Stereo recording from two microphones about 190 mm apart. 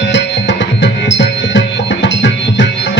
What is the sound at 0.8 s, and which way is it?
Music, 65° left (ahead or behind).